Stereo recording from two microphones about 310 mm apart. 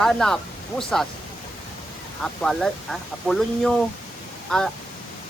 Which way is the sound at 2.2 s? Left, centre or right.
Centre.